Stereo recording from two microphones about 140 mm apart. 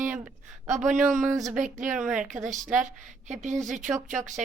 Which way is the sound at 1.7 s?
65° right (ahead or behind).